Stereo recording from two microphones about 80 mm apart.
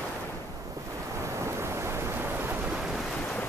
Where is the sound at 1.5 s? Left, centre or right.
Right.